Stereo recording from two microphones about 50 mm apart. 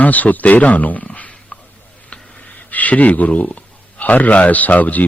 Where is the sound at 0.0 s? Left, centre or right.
Left.